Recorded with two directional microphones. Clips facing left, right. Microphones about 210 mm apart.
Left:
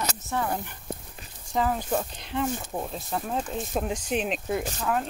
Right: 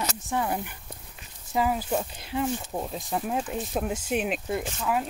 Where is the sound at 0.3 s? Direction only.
15° right (ahead or behind).